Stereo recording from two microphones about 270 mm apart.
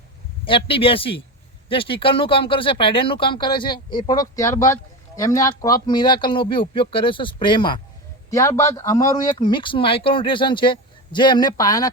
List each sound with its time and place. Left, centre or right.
0.4 s speech: centre